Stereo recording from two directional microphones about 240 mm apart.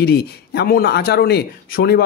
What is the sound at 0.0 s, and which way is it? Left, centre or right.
Speech, left.